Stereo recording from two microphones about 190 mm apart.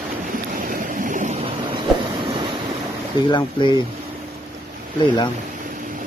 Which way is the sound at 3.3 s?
25° left (ahead or behind).